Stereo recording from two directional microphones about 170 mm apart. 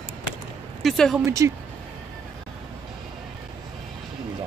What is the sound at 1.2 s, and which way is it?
Speech, 15° right (ahead or behind).